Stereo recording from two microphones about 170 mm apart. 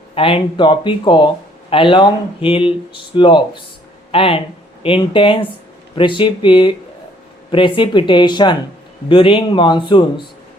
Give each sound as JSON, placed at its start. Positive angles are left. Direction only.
{"t": 0.1, "sound": "speech", "side_deg": 35}